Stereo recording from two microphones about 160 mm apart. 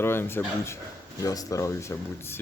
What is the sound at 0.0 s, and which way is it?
Speech, 15° left (ahead or behind).